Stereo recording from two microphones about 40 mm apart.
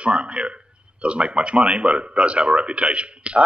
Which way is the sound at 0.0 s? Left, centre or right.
Right.